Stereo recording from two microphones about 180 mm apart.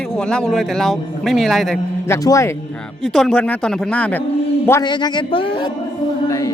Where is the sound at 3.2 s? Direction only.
5° left (ahead or behind).